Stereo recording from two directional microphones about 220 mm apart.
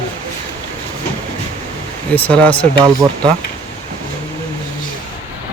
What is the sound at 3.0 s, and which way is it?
Speech, 10° right (ahead or behind).